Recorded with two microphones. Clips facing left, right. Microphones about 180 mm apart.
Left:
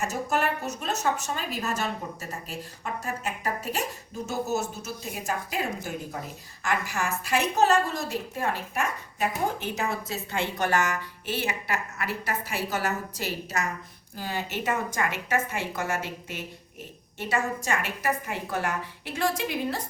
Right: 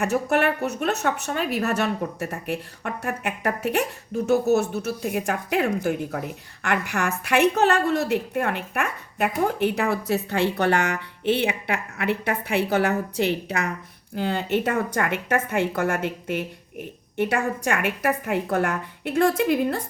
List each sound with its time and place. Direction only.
0.0 s a woman's voice: 60° right (ahead or behind)